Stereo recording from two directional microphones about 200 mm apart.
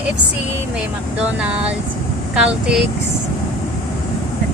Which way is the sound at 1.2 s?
5° right (ahead or behind).